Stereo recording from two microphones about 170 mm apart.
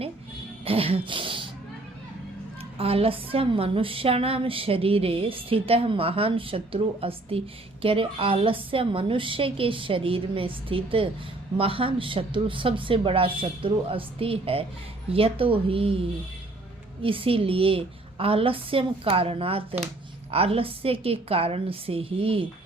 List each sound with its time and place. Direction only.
0.6 s throat clearing: 35° right (ahead or behind)
2.7 s a woman's voice: 35° right (ahead or behind)